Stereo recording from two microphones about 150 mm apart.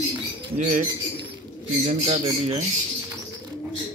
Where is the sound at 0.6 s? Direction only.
55° right (ahead or behind).